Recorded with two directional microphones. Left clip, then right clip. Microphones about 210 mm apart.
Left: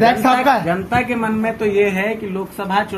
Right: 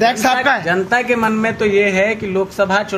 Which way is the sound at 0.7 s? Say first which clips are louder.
Right 3 dB; 40° right (ahead or behind).